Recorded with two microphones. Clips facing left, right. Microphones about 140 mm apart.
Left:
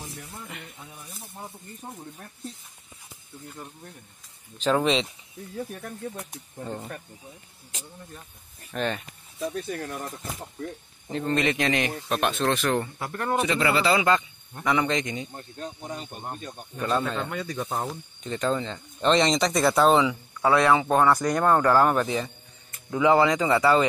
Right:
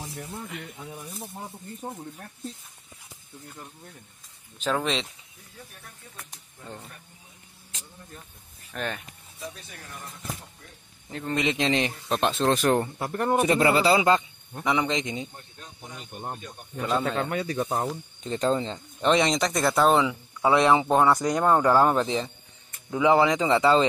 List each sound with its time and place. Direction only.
4.7 s speech: 5° left (ahead or behind)
5.6 s speech: 55° left (ahead or behind)
8.7 s speech: centre (ahead or behind)
9.4 s speech: 55° left (ahead or behind)
11.1 s a man's voice: centre (ahead or behind)
11.3 s speech: 20° right (ahead or behind)
12.5 s a man's voice: 40° right (ahead or behind)
12.8 s speech: 25° right (ahead or behind)
13.4 s a man's voice: 45° right (ahead or behind)
14.6 s speech: 15° right (ahead or behind)
16.8 s speech: 10° right (ahead or behind)
18.2 s speech: 30° right (ahead or behind)
18.9 s speech: 10° right (ahead or behind)
20.4 s speech: 20° right (ahead or behind)